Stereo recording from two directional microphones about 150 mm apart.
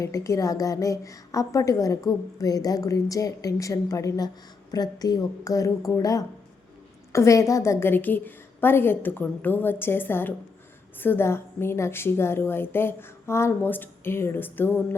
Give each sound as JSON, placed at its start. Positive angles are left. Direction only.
{"t": 0.0, "sound": "a woman's voice", "side_deg": 20}